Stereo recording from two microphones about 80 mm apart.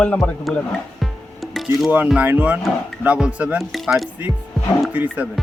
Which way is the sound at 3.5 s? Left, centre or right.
Centre.